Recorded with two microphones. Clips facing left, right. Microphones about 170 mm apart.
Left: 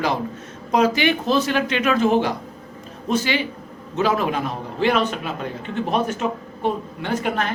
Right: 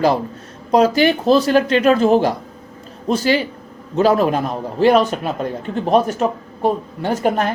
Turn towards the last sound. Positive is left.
turn(degrees=-40)  # may be behind; listen again after turning